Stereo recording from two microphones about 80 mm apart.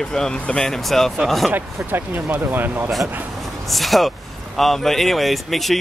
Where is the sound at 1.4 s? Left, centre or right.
Right.